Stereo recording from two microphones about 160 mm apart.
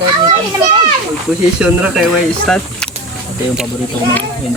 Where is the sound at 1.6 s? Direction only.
5° right (ahead or behind).